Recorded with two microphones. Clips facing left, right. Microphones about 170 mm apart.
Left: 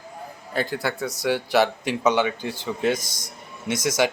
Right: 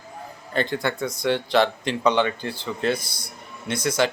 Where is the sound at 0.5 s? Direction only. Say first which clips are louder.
Right 1 dB; 5° left (ahead or behind).